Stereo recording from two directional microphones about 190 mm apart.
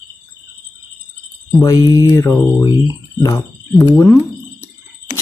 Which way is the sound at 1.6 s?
20° left (ahead or behind).